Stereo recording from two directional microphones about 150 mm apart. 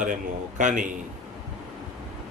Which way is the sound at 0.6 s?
55° right (ahead or behind).